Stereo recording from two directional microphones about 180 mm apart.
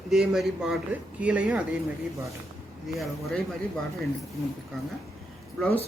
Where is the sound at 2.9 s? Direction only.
Centre (ahead or behind).